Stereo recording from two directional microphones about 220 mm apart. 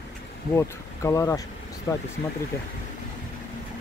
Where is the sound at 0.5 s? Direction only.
15° left (ahead or behind).